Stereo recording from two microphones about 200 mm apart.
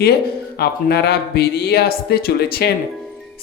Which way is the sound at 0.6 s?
55° left (ahead or behind).